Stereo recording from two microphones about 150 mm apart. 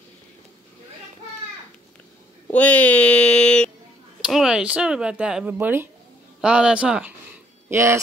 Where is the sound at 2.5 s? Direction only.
10° left (ahead or behind).